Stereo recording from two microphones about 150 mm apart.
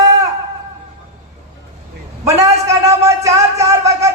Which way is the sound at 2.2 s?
20° right (ahead or behind).